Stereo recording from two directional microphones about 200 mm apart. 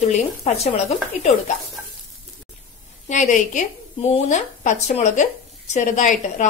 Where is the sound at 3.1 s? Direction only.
40° left (ahead or behind).